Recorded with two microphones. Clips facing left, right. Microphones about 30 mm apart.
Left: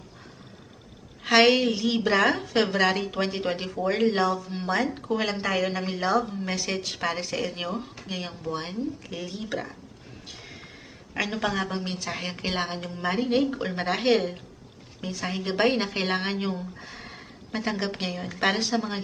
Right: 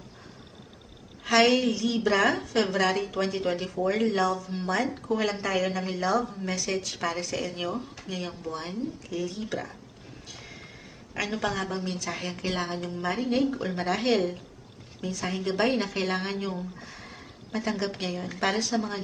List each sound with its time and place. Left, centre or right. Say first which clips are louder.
1.2 s a woman's voice: left 2 dB; left; by 9.6 s centre
10.3 s horse: even; centre
11.2 s a woman's voice: left 2 dB; centre
12.2 s a woman's voice: left 2 dB; left
14.1 s a woman's voice: left 2 dB; centre